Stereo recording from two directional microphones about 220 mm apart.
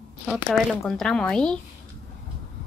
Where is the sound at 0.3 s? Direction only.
Centre (ahead or behind).